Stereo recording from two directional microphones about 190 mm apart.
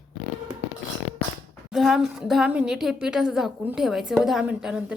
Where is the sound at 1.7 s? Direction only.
Centre (ahead or behind).